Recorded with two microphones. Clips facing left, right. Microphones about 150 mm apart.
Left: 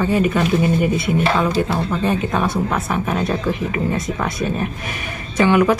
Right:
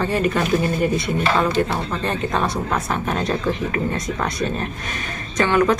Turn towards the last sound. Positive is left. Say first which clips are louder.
# left 3 dB
turn(degrees=10)  # may be behind; listen again after turning